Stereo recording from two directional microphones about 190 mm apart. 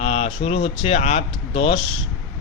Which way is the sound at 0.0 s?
35° left (ahead or behind).